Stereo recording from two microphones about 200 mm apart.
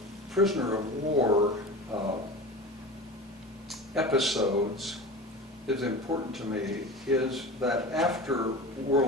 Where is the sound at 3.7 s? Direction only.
Centre (ahead or behind).